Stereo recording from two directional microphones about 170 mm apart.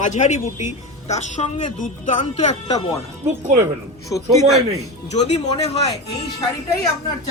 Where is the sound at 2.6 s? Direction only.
20° left (ahead or behind).